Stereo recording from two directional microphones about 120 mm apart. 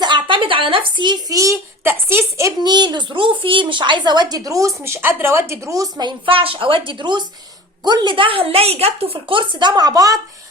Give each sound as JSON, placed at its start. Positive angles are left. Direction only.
{"t": 0.0, "sound": "speech", "side_deg": -40}
{"t": 2.6, "sound": "a woman's voice", "side_deg": -35}